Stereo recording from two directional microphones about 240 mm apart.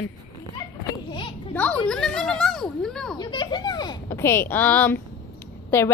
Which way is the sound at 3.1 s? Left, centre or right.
Centre.